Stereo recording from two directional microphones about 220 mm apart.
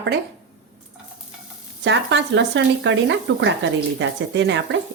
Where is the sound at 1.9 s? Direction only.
55° right (ahead or behind).